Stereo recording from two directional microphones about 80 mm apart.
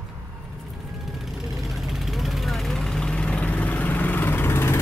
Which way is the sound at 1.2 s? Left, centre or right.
Centre.